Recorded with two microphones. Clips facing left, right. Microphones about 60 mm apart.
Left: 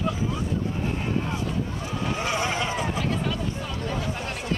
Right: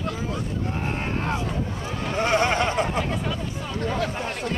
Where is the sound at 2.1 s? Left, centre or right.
Right.